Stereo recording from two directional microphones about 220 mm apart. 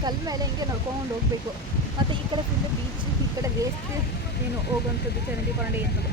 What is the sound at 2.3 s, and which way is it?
Speech, 20° right (ahead or behind).